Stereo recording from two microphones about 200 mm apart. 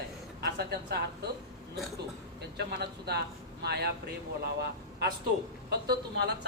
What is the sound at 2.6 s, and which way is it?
A man's voice, 55° right (ahead or behind).